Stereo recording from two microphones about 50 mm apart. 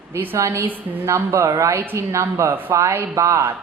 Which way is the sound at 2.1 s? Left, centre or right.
Right.